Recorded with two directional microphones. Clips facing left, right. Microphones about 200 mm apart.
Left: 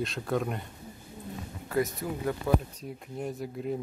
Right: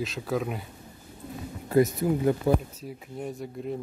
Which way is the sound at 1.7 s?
25° right (ahead or behind).